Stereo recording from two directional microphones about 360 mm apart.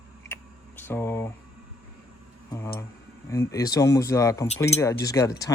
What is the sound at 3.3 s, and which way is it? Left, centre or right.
Speech, centre.